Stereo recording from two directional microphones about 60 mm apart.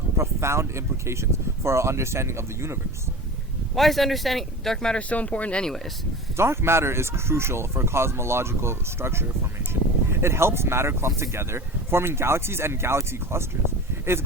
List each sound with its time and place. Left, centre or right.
0.2 s speech: right
3.8 s speech: centre
5.0 s speech: left
5.6 s speech: centre
6.3 s speech: right